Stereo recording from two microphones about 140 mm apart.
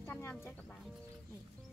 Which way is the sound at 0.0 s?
15° left (ahead or behind).